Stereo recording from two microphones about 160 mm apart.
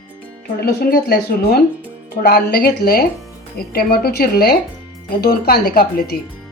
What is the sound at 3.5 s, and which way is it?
A woman's voice, 70° left (ahead or behind).